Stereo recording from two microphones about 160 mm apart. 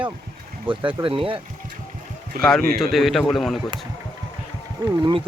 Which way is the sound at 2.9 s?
Centre (ahead or behind).